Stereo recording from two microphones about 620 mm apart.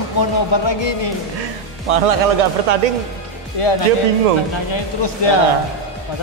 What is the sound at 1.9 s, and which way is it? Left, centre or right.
A man's voice, right.